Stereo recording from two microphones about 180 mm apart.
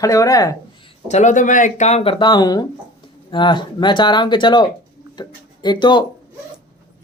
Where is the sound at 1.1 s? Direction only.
40° left (ahead or behind).